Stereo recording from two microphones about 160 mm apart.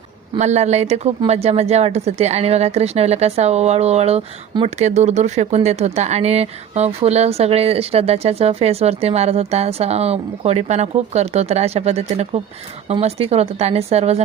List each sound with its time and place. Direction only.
0.3 s speech: 45° right (ahead or behind)